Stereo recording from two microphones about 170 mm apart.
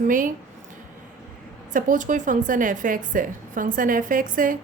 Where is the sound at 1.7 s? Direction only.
50° right (ahead or behind).